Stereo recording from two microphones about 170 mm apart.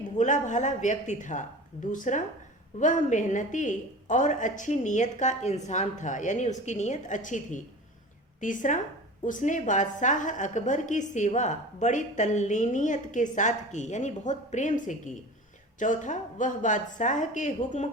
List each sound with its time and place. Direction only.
0.2 s a woman's voice: 45° left (ahead or behind)